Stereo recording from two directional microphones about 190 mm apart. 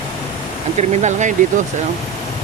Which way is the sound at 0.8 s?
40° right (ahead or behind).